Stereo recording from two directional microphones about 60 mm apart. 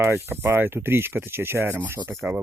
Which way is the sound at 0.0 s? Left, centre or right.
Right.